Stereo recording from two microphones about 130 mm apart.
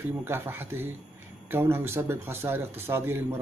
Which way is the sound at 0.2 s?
15° right (ahead or behind).